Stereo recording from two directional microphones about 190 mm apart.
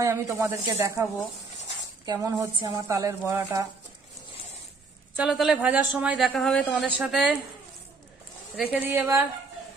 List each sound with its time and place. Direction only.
0.0 s speech: 15° right (ahead or behind)
2.0 s speech: 20° right (ahead or behind)
5.1 s a woman's voice: 5° right (ahead or behind)
6.9 s a woman's voice: 5° right (ahead or behind)
8.7 s speech: 10° right (ahead or behind)